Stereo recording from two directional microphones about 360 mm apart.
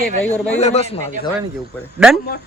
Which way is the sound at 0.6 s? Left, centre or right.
Centre.